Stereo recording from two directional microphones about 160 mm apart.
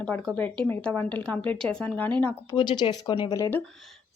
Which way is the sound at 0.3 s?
10° left (ahead or behind).